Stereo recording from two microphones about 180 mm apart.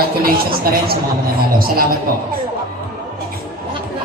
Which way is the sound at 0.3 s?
55° right (ahead or behind).